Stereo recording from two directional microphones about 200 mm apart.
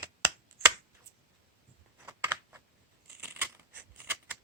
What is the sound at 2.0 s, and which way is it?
Computer keyboard, 10° right (ahead or behind).